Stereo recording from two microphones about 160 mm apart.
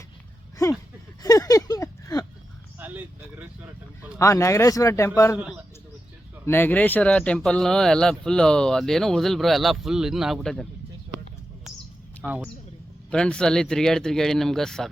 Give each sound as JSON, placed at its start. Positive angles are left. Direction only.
{"t": 0.5, "sound": "a sound", "side_deg": 20}
{"t": 2.7, "sound": "a sound", "side_deg": -10}
{"t": 4.2, "sound": "a man's voice", "side_deg": 20}
{"t": 6.4, "sound": "speech", "side_deg": 15}
{"t": 12.2, "sound": "speech", "side_deg": -10}
{"t": 13.1, "sound": "speech", "side_deg": 5}